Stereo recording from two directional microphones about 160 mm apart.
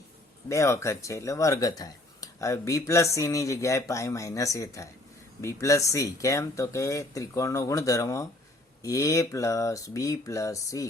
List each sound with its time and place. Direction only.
0.4 s speech: 20° left (ahead or behind)